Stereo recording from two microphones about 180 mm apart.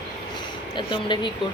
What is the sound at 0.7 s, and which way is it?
Speech, 25° left (ahead or behind).